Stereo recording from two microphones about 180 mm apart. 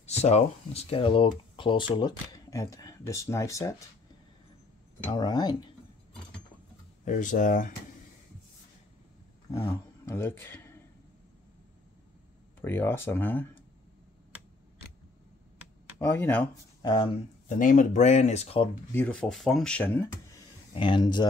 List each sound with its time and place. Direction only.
0.0 s speech: 35° left (ahead or behind); by 3.7 s 15° left (ahead or behind)
5.1 s speech: 25° left (ahead or behind)
7.1 s speech: 45° left (ahead or behind)
9.5 s speech: 15° left (ahead or behind)
12.6 s speech: 10° left (ahead or behind)
16.0 s speech: 15° left (ahead or behind)
16.8 s speech: 30° left (ahead or behind)
17.6 s speech: 45° left (ahead or behind)
18.9 s speech: 10° left (ahead or behind)
20.8 s speech: 25° left (ahead or behind)